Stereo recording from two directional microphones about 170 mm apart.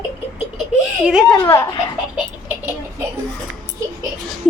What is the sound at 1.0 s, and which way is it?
Speech, 5° right (ahead or behind).